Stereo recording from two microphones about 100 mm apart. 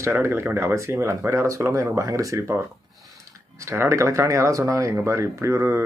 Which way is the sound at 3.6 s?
25° right (ahead or behind).